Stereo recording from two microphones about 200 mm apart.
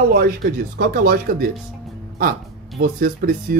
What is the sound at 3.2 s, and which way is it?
Speech, 45° right (ahead or behind).